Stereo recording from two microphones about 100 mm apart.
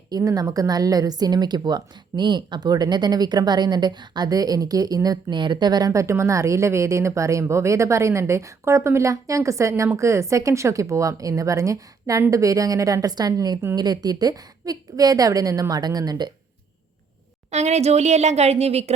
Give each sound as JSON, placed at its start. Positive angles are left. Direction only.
{"t": 0.2, "sound": "speech", "side_deg": -35}
{"t": 17.5, "sound": "speech", "side_deg": -90}